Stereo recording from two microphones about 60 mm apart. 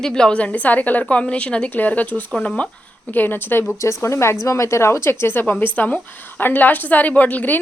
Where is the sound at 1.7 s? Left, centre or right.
Left.